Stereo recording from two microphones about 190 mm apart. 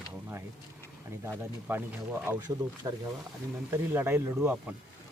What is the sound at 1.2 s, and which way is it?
Speech, 10° right (ahead or behind).